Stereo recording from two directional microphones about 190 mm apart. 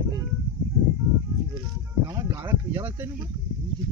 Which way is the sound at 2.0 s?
15° right (ahead or behind).